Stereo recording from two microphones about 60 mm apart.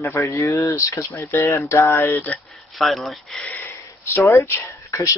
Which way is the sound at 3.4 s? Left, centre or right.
Left.